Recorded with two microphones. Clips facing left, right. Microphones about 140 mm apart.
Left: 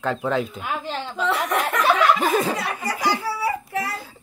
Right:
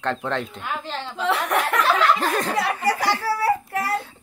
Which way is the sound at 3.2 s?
65° right (ahead or behind).